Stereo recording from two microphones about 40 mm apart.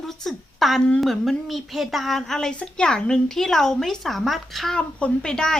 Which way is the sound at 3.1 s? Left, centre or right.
Centre.